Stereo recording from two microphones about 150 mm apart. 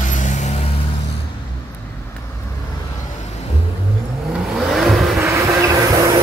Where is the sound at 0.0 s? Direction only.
55° left (ahead or behind).